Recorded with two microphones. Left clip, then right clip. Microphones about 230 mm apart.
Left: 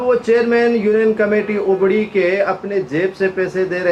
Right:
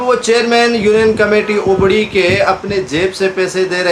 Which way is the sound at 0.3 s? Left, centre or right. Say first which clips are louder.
Right 4 dB; right.